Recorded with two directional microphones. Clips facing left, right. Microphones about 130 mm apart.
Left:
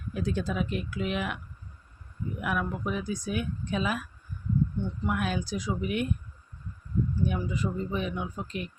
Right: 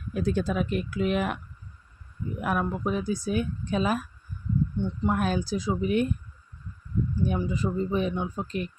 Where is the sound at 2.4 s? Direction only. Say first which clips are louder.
Right 3 dB; 35° right (ahead or behind).